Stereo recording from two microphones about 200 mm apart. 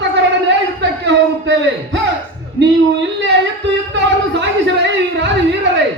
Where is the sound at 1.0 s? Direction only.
60° right (ahead or behind).